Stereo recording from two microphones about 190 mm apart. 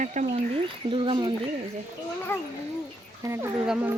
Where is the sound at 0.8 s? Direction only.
25° right (ahead or behind).